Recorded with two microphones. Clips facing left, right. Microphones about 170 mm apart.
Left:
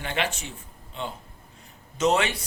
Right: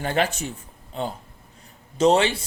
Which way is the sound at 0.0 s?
40° right (ahead or behind).